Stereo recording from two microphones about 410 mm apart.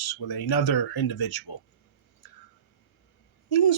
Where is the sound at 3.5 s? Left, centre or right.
Left.